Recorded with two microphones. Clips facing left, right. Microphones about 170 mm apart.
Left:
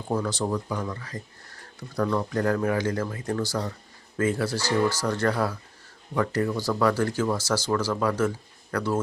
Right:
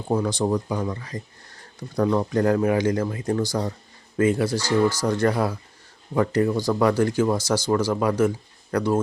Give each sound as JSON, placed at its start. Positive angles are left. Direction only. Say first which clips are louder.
{"t": 0.1, "sound": "speech", "louder": "right 4 dB", "side_deg": -15}
{"t": 4.5, "sound": "speech", "louder": "right 3 dB", "side_deg": 10}
{"t": 5.0, "sound": "speech", "louder": "right 4 dB", "side_deg": -15}